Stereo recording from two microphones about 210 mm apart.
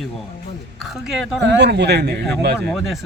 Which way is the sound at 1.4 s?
55° right (ahead or behind).